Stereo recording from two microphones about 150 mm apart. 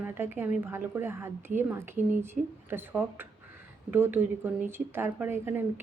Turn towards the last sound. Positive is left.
turn(degrees=-15)  # may be behind; listen again after turning